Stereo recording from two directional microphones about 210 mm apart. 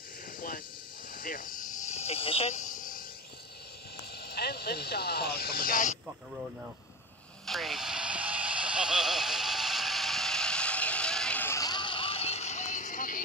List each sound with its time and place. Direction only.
1.1 s snake: 40° left (ahead or behind)
4.2 s speech: 50° left (ahead or behind)
7.4 s vehicle: centre (ahead or behind); by 13.2 s 40° left (ahead or behind)